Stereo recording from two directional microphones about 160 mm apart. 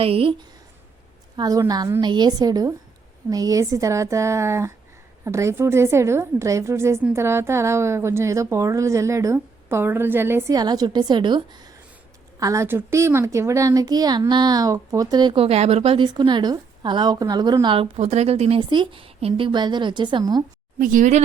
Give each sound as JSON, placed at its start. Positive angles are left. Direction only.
{"t": 0.0, "sound": "speech", "side_deg": -35}
{"t": 1.4, "sound": "a woman's voice", "side_deg": -20}
{"t": 20.7, "sound": "speech", "side_deg": -55}